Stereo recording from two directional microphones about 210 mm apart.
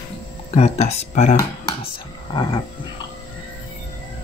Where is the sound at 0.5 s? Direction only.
30° left (ahead or behind).